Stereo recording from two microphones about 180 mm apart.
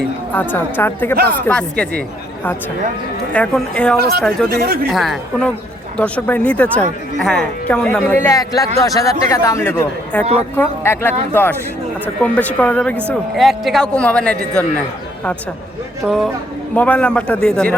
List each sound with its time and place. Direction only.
0.3 s a man's voice: 10° left (ahead or behind)
3.9 s speech: 60° right (ahead or behind)
4.2 s a man's voice: centre (ahead or behind)
4.5 s speech: 60° right (ahead or behind)
4.9 s a man's voice: centre (ahead or behind)
12.2 s a man's voice: 10° left (ahead or behind)
16.0 s a man's voice: centre (ahead or behind)